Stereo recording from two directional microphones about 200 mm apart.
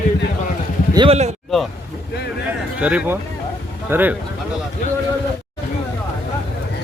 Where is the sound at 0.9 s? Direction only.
30° right (ahead or behind).